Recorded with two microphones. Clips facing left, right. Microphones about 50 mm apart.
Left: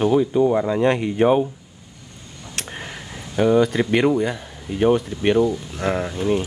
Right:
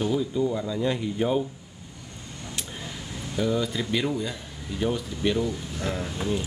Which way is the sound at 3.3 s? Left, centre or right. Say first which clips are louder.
Left 9 dB; left.